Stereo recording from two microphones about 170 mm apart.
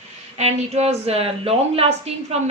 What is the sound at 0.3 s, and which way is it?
A woman's voice, 40° right (ahead or behind).